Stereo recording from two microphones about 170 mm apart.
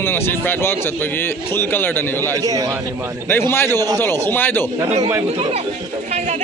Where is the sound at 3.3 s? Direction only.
15° left (ahead or behind).